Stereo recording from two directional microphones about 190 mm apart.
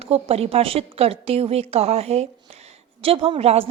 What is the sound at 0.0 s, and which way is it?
A woman's voice, 30° right (ahead or behind).